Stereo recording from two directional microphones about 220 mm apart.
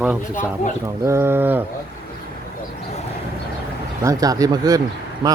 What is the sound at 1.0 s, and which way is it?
Speech, 10° right (ahead or behind).